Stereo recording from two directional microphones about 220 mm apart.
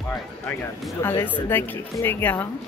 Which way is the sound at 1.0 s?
10° left (ahead or behind).